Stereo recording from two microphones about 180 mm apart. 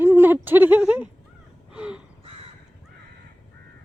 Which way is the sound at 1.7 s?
5° right (ahead or behind).